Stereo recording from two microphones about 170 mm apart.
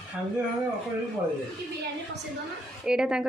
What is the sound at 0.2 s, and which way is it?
Speech, 10° right (ahead or behind).